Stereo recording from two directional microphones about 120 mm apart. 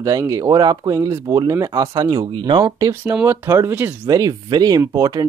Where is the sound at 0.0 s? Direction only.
30° right (ahead or behind).